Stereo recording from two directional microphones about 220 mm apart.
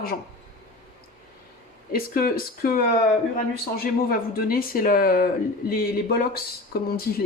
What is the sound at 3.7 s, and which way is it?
Speech, 45° left (ahead or behind).